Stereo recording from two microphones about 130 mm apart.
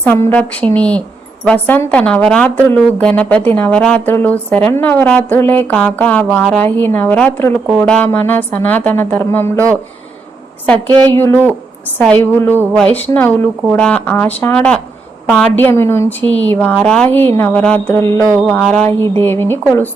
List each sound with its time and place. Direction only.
0.0 s speech: 15° left (ahead or behind)
10.8 s a woman's voice: 35° right (ahead or behind)
11.2 s speech: 15° left (ahead or behind)
18.2 s speech: 10° left (ahead or behind)